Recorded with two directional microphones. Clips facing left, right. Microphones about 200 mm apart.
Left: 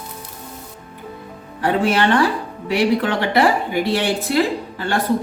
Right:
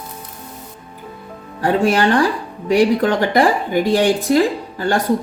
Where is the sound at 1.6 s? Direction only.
45° right (ahead or behind).